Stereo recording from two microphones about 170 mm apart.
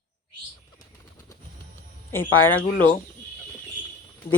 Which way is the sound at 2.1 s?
15° left (ahead or behind).